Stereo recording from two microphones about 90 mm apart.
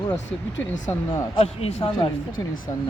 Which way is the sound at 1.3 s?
90° left.